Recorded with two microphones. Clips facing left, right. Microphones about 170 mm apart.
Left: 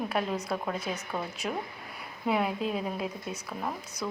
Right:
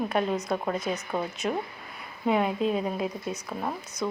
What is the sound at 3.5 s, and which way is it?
Speech, 20° right (ahead or behind).